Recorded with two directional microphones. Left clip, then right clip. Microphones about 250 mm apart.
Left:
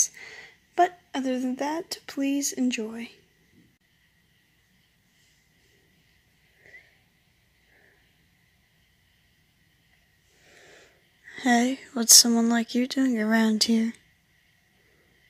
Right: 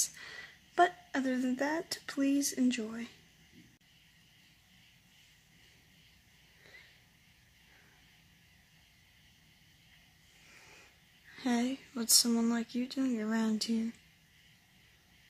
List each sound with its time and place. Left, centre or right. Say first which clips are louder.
0.0 s a woman's voice: left 9 dB; centre
11.2 s speech: left 11 dB; left